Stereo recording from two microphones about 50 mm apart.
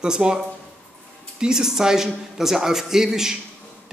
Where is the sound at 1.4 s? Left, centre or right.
Centre.